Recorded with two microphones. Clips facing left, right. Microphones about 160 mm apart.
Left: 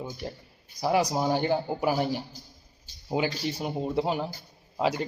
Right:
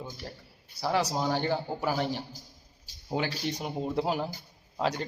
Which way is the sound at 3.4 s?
Centre (ahead or behind).